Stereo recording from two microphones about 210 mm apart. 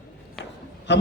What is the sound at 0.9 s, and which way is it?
Speech, 55° left (ahead or behind).